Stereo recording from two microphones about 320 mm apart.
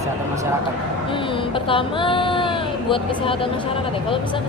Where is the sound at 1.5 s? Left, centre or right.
Centre.